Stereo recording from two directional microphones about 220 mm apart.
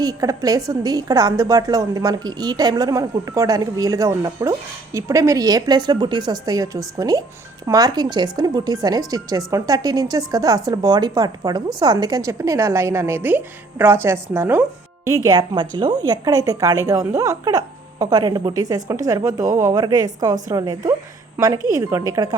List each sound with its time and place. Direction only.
0.0 s a woman's voice: 15° right (ahead or behind)